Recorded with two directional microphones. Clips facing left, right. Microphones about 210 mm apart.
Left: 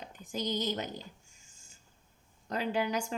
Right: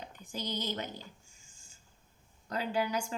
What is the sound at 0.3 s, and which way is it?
Speech, 45° left (ahead or behind).